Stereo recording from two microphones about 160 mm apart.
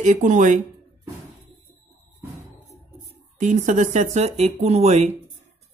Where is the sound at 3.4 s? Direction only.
50° right (ahead or behind).